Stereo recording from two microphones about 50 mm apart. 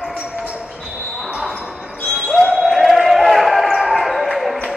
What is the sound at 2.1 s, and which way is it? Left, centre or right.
Basketball bounce, centre.